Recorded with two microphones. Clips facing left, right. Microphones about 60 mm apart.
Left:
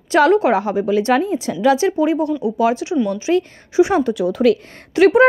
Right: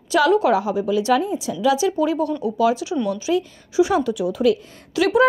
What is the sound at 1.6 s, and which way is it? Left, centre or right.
Speech, left.